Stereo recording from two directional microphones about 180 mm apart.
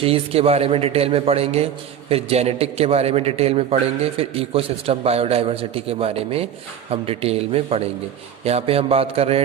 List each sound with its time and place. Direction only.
0.0 s a man's voice: 30° right (ahead or behind)